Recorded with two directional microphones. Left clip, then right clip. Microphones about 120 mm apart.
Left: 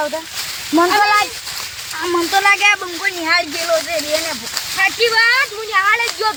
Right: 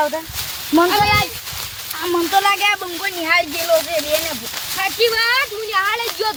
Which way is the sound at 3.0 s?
45° right (ahead or behind).